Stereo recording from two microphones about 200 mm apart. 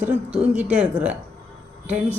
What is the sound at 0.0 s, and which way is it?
Speech, 5° right (ahead or behind).